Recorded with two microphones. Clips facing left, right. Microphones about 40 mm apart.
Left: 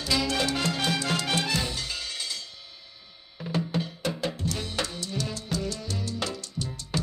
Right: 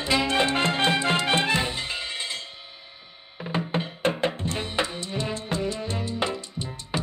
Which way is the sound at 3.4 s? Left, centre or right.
Right.